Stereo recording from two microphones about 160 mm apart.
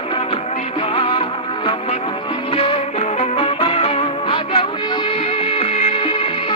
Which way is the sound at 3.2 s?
35° left (ahead or behind).